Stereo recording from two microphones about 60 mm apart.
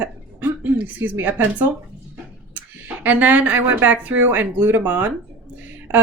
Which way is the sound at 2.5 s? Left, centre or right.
Right.